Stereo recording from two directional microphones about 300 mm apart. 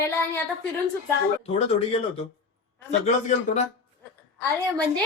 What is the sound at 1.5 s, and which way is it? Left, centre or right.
Speech, centre.